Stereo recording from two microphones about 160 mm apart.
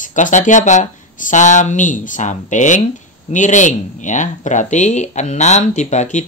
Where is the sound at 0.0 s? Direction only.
50° left (ahead or behind).